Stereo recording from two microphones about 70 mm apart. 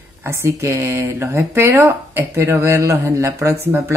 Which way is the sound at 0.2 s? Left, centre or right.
Right.